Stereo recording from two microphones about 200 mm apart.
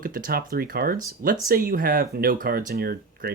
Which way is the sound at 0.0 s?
45° right (ahead or behind).